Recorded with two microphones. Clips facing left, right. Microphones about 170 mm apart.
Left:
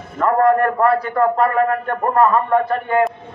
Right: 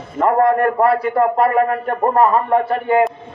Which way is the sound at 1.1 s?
30° right (ahead or behind).